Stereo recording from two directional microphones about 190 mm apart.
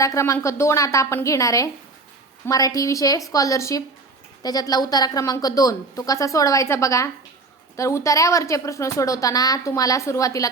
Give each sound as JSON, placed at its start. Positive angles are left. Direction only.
{"t": 0.0, "sound": "a woman's voice", "side_deg": 15}